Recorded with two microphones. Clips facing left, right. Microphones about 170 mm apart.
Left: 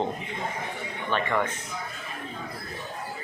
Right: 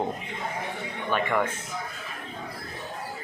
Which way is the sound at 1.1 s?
10° right (ahead or behind).